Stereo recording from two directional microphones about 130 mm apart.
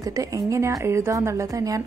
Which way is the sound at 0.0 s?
25° right (ahead or behind).